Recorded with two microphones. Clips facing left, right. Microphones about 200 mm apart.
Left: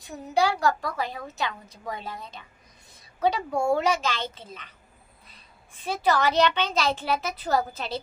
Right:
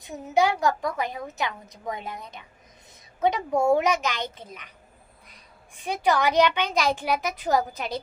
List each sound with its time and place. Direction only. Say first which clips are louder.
0.0 s a woman's voice: right 2 dB; 20° right (ahead or behind)
5.9 s a woman's voice: right 1 dB; 15° right (ahead or behind)